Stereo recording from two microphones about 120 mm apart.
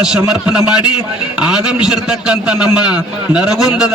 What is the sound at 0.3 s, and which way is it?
A man's voice, 10° right (ahead or behind).